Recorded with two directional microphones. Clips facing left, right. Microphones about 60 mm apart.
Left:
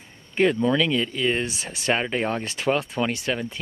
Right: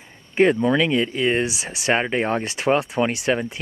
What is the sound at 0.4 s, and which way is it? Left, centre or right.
Speech, right.